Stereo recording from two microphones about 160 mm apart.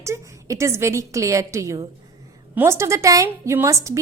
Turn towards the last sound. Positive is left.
turn(degrees=-20)  # may be behind; listen again after turning